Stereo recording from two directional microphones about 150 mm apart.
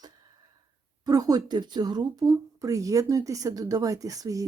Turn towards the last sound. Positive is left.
turn(degrees=-25)  # may be behind; listen again after turning